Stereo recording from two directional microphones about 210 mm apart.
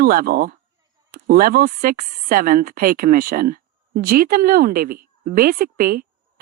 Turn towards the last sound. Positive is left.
turn(degrees=-45)  # may be behind; listen again after turning